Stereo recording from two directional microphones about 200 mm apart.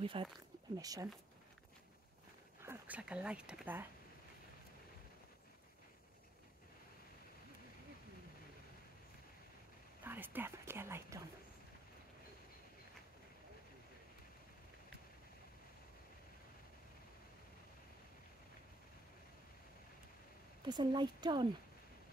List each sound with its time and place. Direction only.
0.0 s speech: 25° right (ahead or behind)
2.6 s speech: 10° right (ahead or behind)
10.0 s speech: 10° right (ahead or behind)
20.6 s speech: 20° right (ahead or behind)